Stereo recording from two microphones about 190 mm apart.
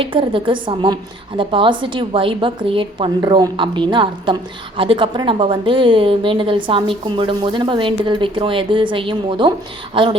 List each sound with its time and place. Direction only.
0.0 s a woman's voice: 25° right (ahead or behind)